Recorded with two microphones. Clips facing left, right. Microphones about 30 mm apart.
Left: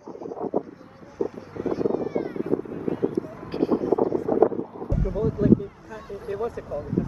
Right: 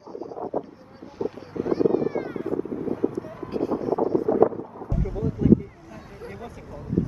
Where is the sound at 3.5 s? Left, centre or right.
Left.